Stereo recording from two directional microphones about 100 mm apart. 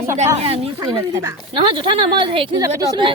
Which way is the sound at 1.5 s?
60° right (ahead or behind).